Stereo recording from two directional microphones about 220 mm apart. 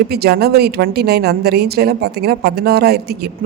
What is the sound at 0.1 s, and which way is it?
A woman's voice, 45° right (ahead or behind).